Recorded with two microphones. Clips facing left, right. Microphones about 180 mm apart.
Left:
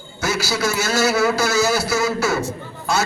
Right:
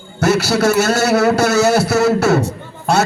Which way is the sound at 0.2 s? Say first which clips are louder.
Right 8 dB; 65° right (ahead or behind).